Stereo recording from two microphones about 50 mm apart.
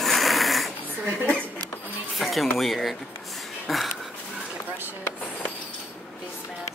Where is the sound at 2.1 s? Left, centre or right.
Centre.